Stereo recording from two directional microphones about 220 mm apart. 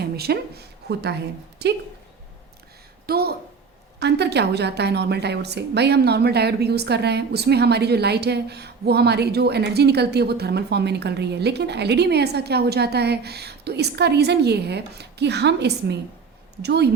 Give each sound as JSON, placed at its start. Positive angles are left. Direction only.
{"t": 0.0, "sound": "a sound", "side_deg": -45}
{"t": 1.6, "sound": "a woman's voice", "side_deg": -50}
{"t": 3.1, "sound": "a woman's voice", "side_deg": -45}